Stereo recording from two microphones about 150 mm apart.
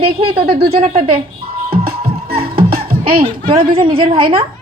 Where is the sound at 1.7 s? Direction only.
90° right.